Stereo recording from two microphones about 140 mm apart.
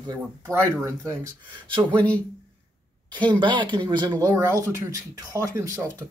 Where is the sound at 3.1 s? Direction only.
35° right (ahead or behind).